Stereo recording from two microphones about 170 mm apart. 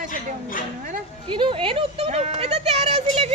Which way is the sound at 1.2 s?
30° right (ahead or behind).